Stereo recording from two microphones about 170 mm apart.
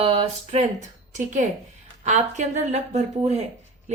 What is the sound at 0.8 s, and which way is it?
A woman's voice, 45° right (ahead or behind).